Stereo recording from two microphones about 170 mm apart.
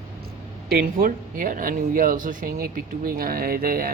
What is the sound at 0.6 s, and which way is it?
Speech, 60° right (ahead or behind).